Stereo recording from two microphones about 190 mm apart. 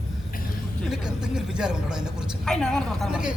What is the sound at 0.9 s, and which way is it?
A man's voice, 5° right (ahead or behind).